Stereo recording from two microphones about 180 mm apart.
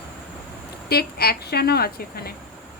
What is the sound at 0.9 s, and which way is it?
Speech, 60° left (ahead or behind).